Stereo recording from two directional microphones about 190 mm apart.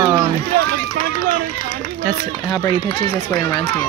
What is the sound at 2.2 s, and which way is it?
Speech, 20° left (ahead or behind).